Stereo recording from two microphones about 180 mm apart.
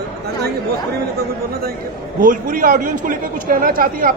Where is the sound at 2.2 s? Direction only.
50° right (ahead or behind).